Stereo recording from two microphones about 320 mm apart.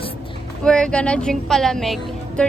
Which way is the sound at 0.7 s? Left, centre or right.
Centre.